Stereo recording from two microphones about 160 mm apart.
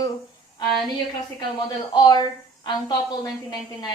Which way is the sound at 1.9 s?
25° left (ahead or behind).